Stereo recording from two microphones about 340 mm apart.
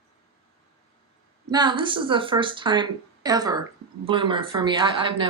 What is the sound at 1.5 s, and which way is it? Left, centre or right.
Speech, centre.